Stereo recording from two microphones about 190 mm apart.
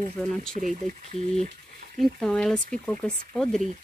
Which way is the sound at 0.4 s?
5° left (ahead or behind).